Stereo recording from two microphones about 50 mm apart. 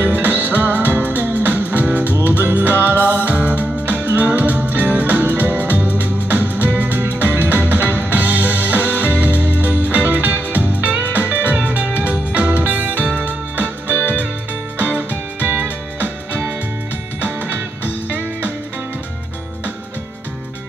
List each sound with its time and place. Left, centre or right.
0.0 s music: right